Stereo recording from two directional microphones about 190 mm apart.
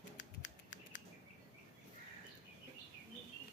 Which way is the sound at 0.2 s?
75° left (ahead or behind).